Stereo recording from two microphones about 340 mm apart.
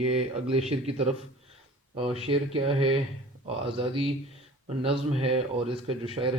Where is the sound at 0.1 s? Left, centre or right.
Centre.